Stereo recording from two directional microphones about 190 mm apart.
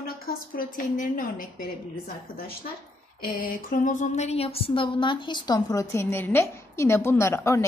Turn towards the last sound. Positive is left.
turn(degrees=15)  # may be behind; listen again after turning